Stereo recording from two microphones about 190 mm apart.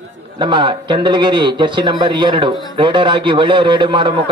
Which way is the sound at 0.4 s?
25° right (ahead or behind).